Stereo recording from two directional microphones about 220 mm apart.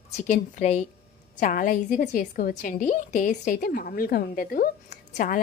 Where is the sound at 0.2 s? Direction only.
30° left (ahead or behind).